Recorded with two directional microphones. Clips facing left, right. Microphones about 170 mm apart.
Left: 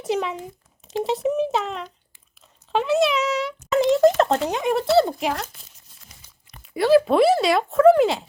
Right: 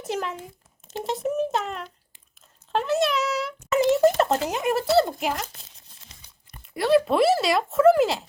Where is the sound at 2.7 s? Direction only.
Centre (ahead or behind).